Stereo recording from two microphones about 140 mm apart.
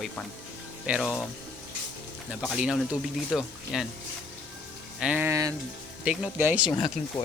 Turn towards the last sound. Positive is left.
turn(degrees=30)  # may be behind; listen again after turning